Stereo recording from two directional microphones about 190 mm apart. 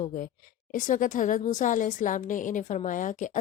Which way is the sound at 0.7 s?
45° left (ahead or behind).